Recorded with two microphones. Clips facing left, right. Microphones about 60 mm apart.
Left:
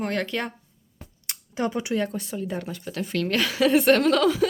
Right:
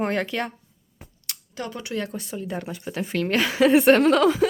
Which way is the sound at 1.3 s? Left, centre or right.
Left.